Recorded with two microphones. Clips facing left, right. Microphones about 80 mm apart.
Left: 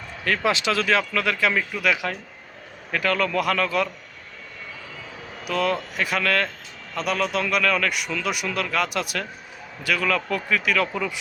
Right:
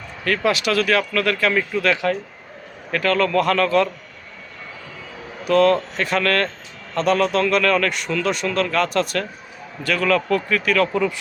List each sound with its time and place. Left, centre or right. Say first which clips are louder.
0.3 s a man's voice: right 3 dB; left
5.5 s a man's voice: right 8 dB; centre